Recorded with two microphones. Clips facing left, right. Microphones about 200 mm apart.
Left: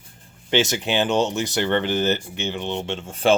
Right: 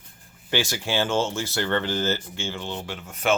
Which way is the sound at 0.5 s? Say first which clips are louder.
Left 5 dB; 20° left (ahead or behind).